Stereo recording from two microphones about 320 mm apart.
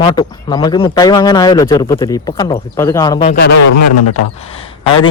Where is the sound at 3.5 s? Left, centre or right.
Left.